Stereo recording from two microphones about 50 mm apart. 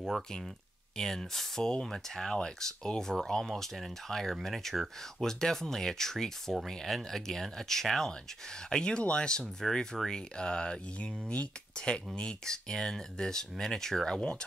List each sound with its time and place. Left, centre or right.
0.9 s speech: centre